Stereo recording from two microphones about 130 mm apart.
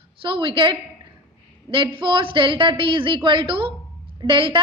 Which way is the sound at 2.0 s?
40° right (ahead or behind).